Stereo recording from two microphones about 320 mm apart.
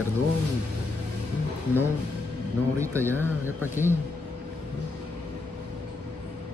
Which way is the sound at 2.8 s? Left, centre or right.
Centre.